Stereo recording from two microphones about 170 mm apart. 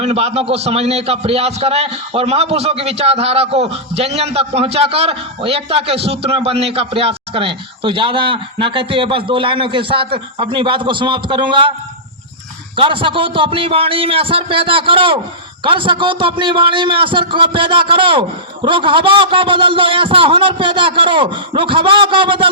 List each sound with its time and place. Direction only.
0.0 s a man's voice: 35° right (ahead or behind)
12.7 s a man's voice: 30° right (ahead or behind)